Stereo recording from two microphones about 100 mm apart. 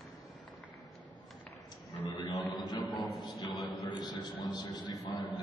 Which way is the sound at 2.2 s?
45° left (ahead or behind).